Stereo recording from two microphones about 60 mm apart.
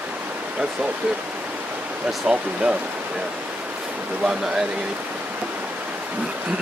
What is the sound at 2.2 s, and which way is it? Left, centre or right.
Speech, centre.